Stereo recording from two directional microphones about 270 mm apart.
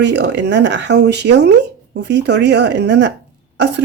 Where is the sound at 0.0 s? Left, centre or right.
Right.